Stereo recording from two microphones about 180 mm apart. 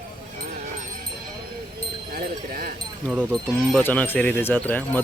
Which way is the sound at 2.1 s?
55° right (ahead or behind).